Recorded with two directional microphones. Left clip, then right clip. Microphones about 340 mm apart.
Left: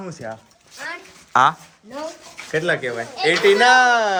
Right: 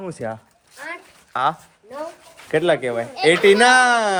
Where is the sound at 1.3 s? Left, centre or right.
Centre.